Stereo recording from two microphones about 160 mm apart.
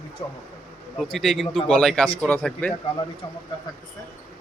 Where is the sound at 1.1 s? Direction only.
Centre (ahead or behind).